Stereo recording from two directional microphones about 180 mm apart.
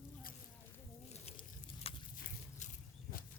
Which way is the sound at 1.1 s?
35° left (ahead or behind).